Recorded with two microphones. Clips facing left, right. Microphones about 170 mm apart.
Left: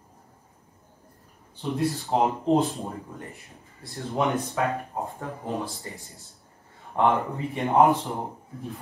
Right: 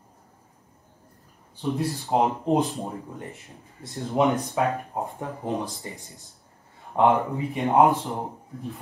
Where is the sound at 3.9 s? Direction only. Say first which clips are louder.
Right 3 dB; 15° right (ahead or behind).